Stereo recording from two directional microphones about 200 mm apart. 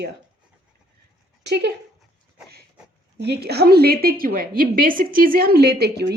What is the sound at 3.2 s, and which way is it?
A woman's voice, 55° right (ahead or behind).